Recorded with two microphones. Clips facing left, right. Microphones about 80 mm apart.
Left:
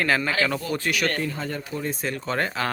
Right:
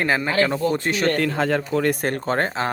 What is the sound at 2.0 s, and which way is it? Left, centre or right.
Speech, right.